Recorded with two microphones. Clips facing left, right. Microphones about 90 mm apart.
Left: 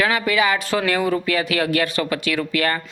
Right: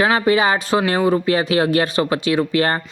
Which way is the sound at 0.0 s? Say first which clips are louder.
Right 4 dB; 30° right (ahead or behind).